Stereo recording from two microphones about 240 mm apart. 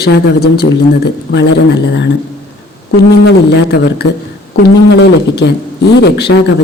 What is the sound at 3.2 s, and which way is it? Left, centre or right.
A man's voice, left.